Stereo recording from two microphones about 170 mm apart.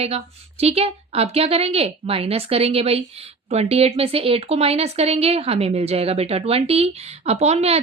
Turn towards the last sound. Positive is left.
turn(degrees=-40)  # may be behind; listen again after turning